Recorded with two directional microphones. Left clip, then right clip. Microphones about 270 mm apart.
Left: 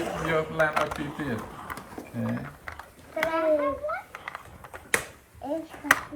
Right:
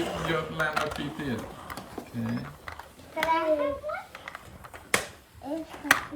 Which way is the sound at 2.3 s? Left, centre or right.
Centre.